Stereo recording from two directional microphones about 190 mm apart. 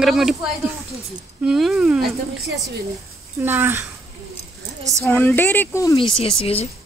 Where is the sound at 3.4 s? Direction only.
10° right (ahead or behind).